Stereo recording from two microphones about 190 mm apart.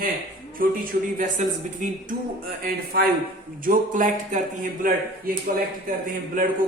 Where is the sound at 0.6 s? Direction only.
50° right (ahead or behind).